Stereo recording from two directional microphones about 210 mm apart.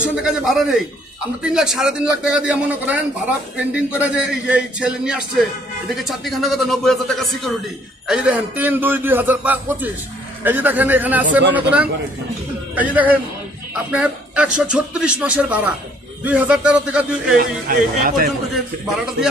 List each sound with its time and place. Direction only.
0.1 s a man's voice: centre (ahead or behind)
17.4 s speech: 40° right (ahead or behind)